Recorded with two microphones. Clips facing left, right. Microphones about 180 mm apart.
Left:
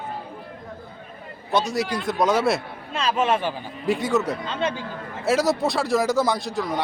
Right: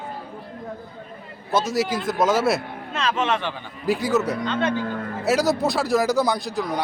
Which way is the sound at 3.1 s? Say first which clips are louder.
Left 4 dB; 40° left (ahead or behind).